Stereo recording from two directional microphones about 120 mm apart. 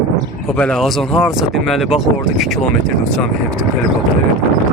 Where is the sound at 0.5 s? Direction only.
5° left (ahead or behind).